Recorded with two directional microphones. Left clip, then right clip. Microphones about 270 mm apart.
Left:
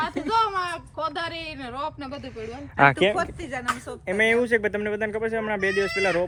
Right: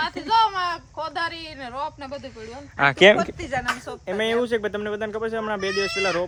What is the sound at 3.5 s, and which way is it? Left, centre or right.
Speech, right.